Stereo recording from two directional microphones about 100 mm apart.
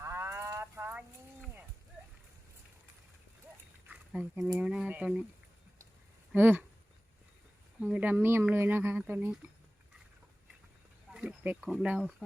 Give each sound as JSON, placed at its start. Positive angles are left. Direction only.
{"t": 0.0, "sound": "a sound", "side_deg": -25}
{"t": 3.8, "sound": "a sound", "side_deg": -10}
{"t": 4.6, "sound": "speech", "side_deg": -10}
{"t": 6.3, "sound": "speech", "side_deg": -20}
{"t": 7.8, "sound": "speech", "side_deg": -15}
{"t": 11.1, "sound": "speech", "side_deg": -10}